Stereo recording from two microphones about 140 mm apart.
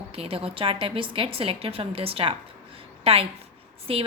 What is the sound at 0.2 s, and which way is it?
A woman's voice, 45° right (ahead or behind).